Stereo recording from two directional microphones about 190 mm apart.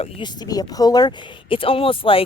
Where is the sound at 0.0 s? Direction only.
25° left (ahead or behind).